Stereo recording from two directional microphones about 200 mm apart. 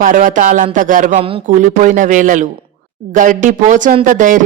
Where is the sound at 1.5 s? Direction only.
40° right (ahead or behind).